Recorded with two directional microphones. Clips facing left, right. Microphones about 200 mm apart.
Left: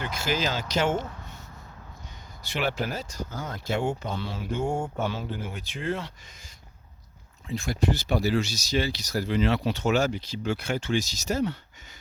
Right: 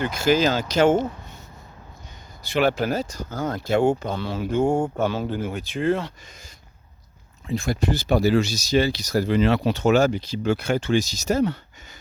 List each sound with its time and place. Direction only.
0.0 s speech: 50° right (ahead or behind)
2.5 s speech: 50° right (ahead or behind)
7.4 s speech: 55° right (ahead or behind)